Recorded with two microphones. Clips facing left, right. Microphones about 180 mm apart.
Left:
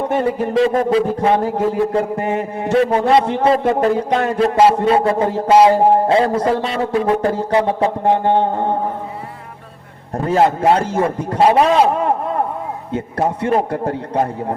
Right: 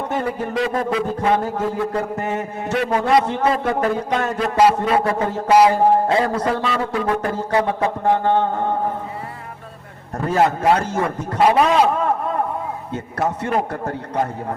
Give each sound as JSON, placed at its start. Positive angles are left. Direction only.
{"t": 0.1, "sound": "a man's voice", "side_deg": 30}
{"t": 1.5, "sound": "a man's voice", "side_deg": 15}
{"t": 10.2, "sound": "a man's voice", "side_deg": 25}
{"t": 13.1, "sound": "a man's voice", "side_deg": 30}